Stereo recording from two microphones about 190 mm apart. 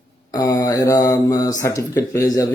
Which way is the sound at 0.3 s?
20° left (ahead or behind).